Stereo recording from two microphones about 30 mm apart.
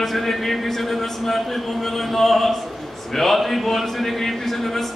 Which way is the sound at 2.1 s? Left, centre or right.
Centre.